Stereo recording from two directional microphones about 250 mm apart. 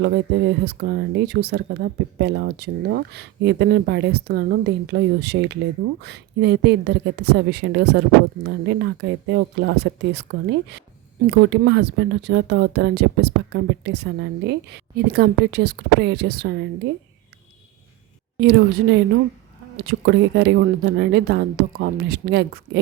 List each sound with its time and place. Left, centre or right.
0.0 s speech: right
18.3 s speech: right